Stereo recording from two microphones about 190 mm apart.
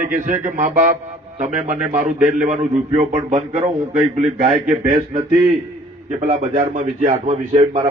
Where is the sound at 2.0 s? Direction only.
5° right (ahead or behind).